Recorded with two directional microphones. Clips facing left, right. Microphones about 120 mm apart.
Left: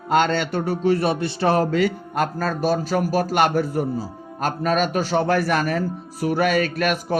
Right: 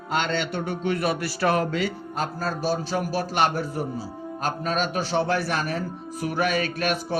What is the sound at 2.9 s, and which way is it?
A man's voice, 45° left (ahead or behind).